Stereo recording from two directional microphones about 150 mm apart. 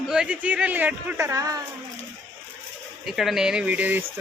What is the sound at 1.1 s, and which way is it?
Speech, 20° right (ahead or behind).